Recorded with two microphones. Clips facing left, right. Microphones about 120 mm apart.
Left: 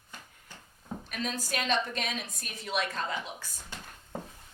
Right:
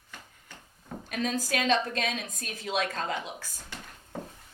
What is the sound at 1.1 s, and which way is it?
A woman's voice, 90° right.